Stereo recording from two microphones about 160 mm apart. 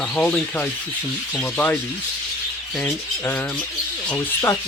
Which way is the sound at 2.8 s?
10° left (ahead or behind).